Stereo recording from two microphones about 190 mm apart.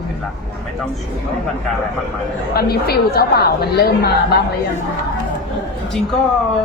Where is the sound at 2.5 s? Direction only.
55° left (ahead or behind).